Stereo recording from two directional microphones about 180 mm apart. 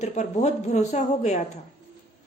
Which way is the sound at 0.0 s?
40° left (ahead or behind).